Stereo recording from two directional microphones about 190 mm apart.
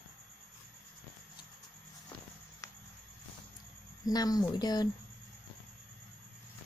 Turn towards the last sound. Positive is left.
turn(degrees=20)  # may be behind; listen again after turning